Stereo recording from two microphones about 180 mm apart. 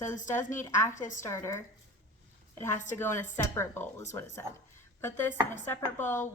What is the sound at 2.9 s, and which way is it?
Speech, 10° left (ahead or behind).